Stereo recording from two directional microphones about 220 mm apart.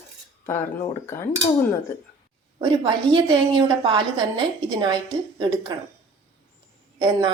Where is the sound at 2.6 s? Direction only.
15° right (ahead or behind).